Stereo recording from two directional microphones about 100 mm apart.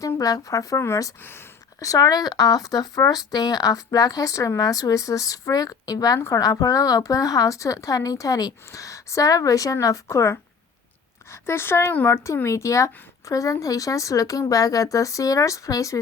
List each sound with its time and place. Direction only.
0.2 s speech: 35° left (ahead or behind)
1.8 s speech: 35° left (ahead or behind)
6.1 s speech: 25° left (ahead or behind)
6.4 s speech: 40° left (ahead or behind)